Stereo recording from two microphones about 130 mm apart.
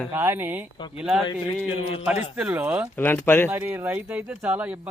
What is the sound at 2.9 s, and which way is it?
Speech, 15° left (ahead or behind).